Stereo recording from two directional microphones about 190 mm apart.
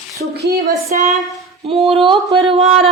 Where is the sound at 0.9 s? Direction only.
35° right (ahead or behind).